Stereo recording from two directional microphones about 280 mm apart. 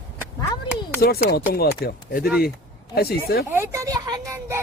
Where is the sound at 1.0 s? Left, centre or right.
Left.